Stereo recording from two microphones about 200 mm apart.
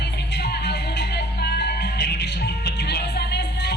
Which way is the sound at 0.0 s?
55° left (ahead or behind).